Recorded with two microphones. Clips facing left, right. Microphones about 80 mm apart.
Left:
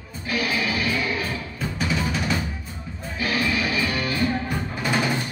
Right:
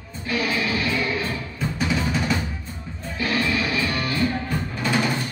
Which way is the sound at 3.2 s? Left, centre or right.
Centre.